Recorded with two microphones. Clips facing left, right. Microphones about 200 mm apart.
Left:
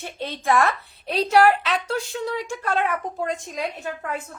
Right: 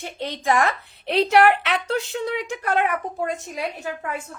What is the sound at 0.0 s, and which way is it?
A woman's voice, 15° right (ahead or behind).